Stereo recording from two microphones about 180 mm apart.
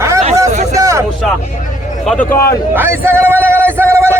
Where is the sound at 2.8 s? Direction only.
10° right (ahead or behind).